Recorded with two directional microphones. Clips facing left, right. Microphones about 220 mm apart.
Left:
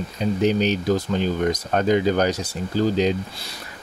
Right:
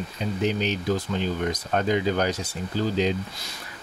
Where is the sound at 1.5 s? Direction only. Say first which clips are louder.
Left 5 dB; 40° left (ahead or behind).